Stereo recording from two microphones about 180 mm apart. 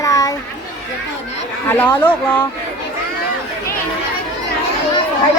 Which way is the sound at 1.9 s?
10° left (ahead or behind).